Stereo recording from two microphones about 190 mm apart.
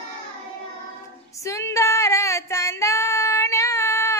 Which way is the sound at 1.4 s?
15° left (ahead or behind).